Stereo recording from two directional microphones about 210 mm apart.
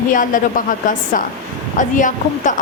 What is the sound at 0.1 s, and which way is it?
A woman's voice, 40° left (ahead or behind).